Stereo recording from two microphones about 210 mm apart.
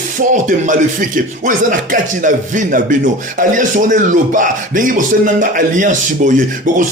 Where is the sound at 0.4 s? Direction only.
40° right (ahead or behind).